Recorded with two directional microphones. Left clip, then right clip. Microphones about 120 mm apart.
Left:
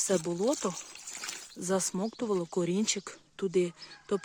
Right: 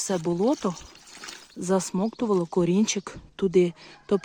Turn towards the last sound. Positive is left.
turn(degrees=-20)  # may be behind; listen again after turning